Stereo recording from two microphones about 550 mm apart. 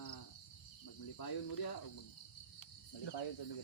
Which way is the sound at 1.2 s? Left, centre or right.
Left.